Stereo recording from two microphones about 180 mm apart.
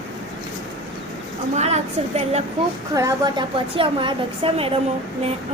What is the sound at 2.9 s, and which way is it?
A woman's voice, 20° right (ahead or behind).